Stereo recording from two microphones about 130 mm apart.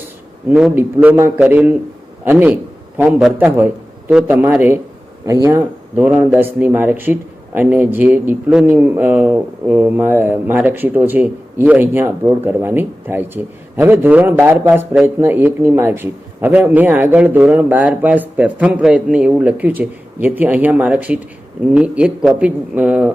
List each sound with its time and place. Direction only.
0.5 s a man's voice: 5° right (ahead or behind)
5.2 s speech: 25° right (ahead or behind)
6.0 s a man's voice: 10° right (ahead or behind)